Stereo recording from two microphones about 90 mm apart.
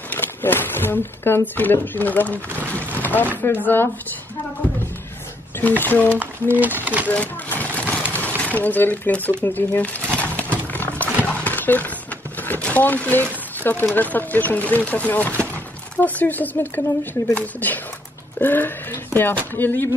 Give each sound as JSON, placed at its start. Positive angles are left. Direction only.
{"t": 0.1, "sound": "speech", "side_deg": 20}
{"t": 3.0, "sound": "chopping", "side_deg": 20}
{"t": 3.4, "sound": "speech", "side_deg": 20}
{"t": 5.6, "sound": "speech", "side_deg": 20}
{"t": 6.6, "sound": "speech", "side_deg": -20}
{"t": 7.1, "sound": "a sound", "side_deg": 20}
{"t": 8.4, "sound": "speech", "side_deg": 15}
{"t": 10.2, "sound": "a sound", "side_deg": 15}
{"t": 11.2, "sound": "horse", "side_deg": 15}
{"t": 12.4, "sound": "a sound", "side_deg": 15}
{"t": 13.9, "sound": "speech", "side_deg": 20}